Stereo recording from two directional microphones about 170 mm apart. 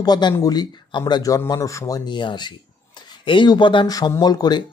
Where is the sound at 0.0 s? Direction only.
25° left (ahead or behind).